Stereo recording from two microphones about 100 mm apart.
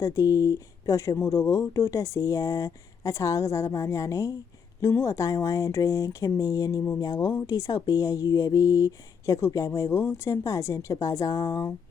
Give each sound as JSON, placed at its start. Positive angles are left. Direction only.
{"t": 0.0, "sound": "speech", "side_deg": 35}
{"t": 10.4, "sound": "speech", "side_deg": 35}